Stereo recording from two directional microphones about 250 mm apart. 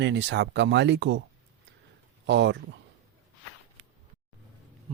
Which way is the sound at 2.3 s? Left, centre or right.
Right.